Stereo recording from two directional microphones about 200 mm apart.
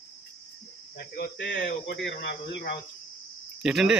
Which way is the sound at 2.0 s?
60° left (ahead or behind).